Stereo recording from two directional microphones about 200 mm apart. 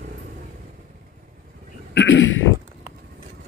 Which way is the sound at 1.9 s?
70° left (ahead or behind).